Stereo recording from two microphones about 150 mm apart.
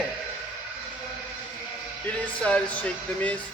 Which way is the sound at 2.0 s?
10° left (ahead or behind).